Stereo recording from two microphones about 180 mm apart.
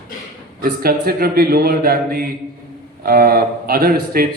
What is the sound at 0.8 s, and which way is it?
A man's voice, 55° right (ahead or behind).